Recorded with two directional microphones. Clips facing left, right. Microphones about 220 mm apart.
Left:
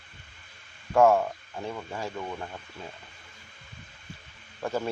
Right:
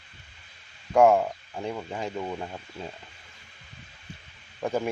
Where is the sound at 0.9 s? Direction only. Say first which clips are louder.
Right 1 dB; 15° right (ahead or behind).